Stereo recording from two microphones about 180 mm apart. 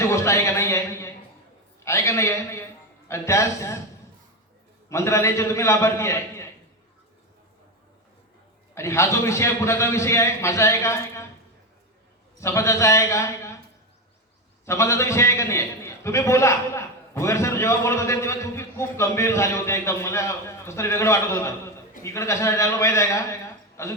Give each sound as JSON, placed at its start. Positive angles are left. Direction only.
{"t": 0.0, "sound": "a sound", "side_deg": 15}
{"t": 1.8, "sound": "a man's voice", "side_deg": 15}
{"t": 4.9, "sound": "a man's voice", "side_deg": 15}
{"t": 8.7, "sound": "a man's voice", "side_deg": 15}
{"t": 12.4, "sound": "a man's voice", "side_deg": 15}
{"t": 14.6, "sound": "a man's voice", "side_deg": 15}